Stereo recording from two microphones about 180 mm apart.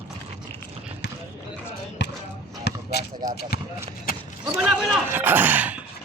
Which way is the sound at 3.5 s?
60° left (ahead or behind).